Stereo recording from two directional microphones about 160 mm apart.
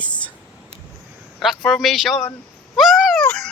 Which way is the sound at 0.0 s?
10° left (ahead or behind).